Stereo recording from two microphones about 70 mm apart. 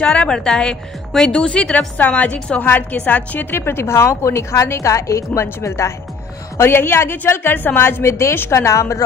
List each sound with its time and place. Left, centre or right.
0.0 s a woman's voice: centre; by 5.9 s left
6.6 s a woman's voice: left